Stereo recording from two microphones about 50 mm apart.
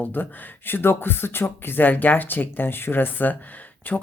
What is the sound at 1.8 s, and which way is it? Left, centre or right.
Speech, left.